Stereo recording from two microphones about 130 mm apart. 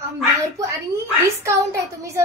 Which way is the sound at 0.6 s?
25° right (ahead or behind).